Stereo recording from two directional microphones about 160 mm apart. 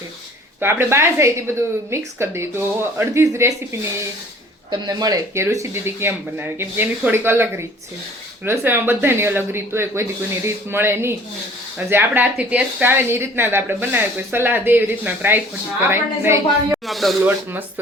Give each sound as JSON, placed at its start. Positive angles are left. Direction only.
{"t": 0.6, "sound": "speech", "side_deg": -15}
{"t": 16.8, "sound": "speech", "side_deg": 0}